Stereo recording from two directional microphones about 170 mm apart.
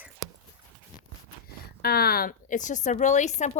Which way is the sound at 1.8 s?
65° left (ahead or behind).